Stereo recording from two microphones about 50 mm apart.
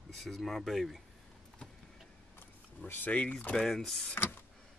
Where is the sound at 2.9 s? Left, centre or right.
Left.